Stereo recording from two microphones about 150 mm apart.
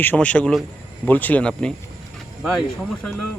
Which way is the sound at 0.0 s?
10° left (ahead or behind).